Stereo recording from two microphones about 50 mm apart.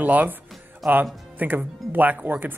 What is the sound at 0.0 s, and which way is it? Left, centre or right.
Speech, right.